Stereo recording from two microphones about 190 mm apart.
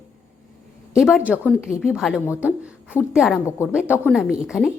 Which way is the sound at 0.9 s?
5° right (ahead or behind).